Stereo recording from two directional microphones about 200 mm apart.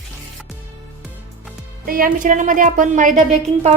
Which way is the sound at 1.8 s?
45° right (ahead or behind).